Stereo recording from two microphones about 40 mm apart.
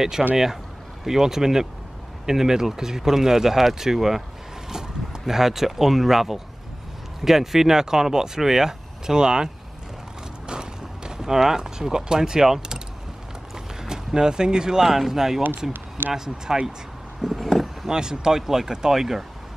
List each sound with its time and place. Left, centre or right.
0.2 s speech: centre
10.4 s a sound: centre
11.3 s speech: centre
16.0 s speech: right
16.5 s speech: centre
17.2 s vehicle: centre
17.8 s speech: centre